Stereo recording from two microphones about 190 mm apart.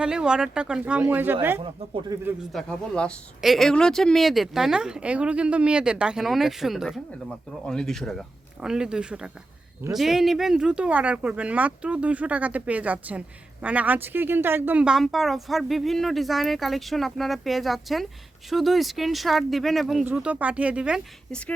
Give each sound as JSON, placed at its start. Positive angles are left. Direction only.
{"t": 0.0, "sound": "speech", "side_deg": -5}
{"t": 2.5, "sound": "speech", "side_deg": 5}